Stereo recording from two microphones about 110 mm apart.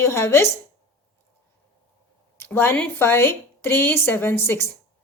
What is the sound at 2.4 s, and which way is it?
A woman's voice, 20° left (ahead or behind).